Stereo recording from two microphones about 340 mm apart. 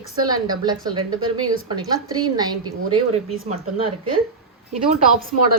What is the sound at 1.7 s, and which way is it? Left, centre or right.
A woman's voice, centre.